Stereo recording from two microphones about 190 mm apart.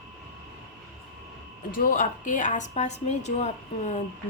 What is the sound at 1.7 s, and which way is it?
A woman's voice, 45° left (ahead or behind).